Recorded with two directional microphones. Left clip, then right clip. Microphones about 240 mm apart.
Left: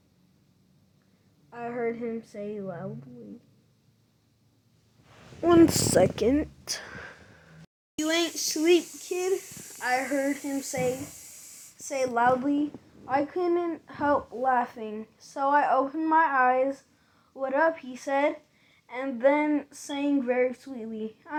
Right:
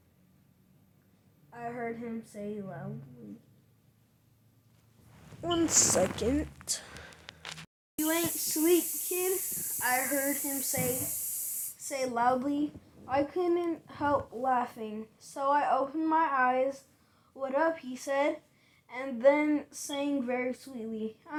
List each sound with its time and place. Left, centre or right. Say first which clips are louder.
1.5 s a woman's voice: left 6 dB; left
5.4 s speech: left 8 dB; left
7.9 s a woman's voice: left 4 dB; left
11.9 s a woman's voice: left 5 dB; left